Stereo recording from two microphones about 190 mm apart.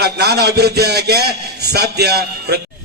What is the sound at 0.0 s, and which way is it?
A man's voice, 60° right (ahead or behind).